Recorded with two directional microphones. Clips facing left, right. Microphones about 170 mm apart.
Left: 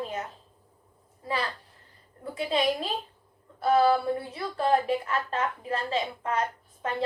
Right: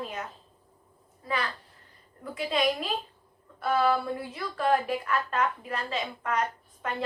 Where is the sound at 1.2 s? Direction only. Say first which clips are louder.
Left 1 dB; 30° left (ahead or behind).